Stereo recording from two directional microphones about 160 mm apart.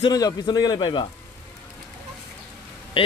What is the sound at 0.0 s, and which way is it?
A man's voice, 25° left (ahead or behind).